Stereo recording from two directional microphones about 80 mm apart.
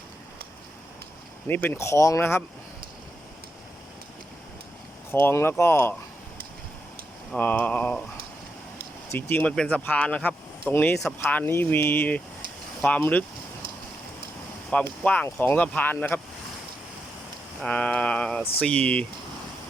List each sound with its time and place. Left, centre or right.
1.5 s speech: left
1.8 s speech: left
5.1 s speech: left
7.3 s speech: left
9.1 s speech: left
9.5 s a sound: centre
10.7 s speech: left
14.7 s speech: centre
17.7 s a sound: centre